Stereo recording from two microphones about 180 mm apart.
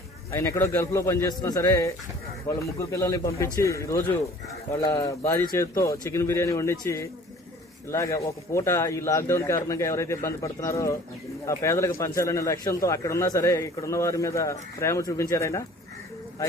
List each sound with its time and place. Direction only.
0.3 s a man's voice: 15° left (ahead or behind)